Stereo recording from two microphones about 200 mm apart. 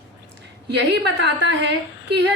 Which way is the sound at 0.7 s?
55° right (ahead or behind).